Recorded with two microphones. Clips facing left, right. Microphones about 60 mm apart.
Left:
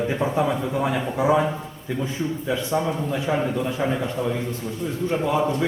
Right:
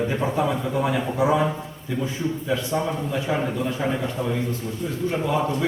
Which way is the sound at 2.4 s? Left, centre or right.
Centre.